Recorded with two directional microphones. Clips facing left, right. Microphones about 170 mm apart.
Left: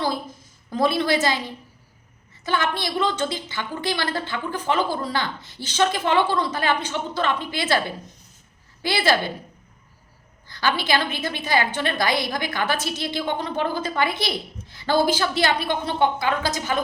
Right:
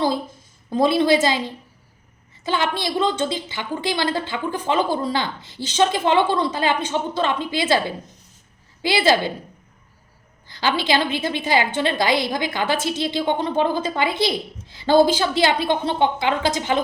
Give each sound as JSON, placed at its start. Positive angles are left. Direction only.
{"t": 0.7, "sound": "a woman's voice", "side_deg": -20}
{"t": 2.4, "sound": "a woman's voice", "side_deg": -20}
{"t": 10.5, "sound": "a woman's voice", "side_deg": -20}